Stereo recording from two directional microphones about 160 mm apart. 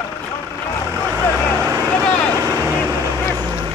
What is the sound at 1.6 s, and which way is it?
Vehicle, 15° right (ahead or behind).